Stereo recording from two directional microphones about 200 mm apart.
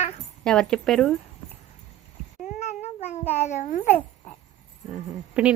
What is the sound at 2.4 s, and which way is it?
Cat, 35° left (ahead or behind).